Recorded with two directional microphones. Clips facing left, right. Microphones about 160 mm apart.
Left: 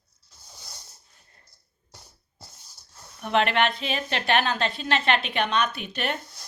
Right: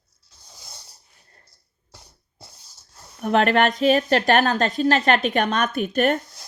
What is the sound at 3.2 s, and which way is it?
Speech, 45° right (ahead or behind).